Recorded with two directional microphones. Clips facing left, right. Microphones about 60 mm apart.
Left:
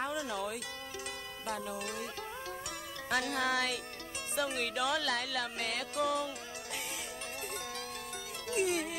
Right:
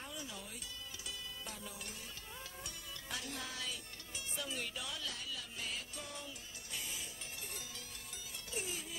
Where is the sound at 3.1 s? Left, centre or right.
Left.